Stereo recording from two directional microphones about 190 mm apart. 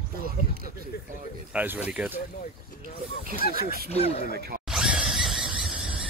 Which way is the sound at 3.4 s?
55° left (ahead or behind).